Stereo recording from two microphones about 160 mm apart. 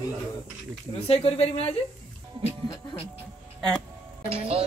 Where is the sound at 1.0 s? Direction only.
40° left (ahead or behind).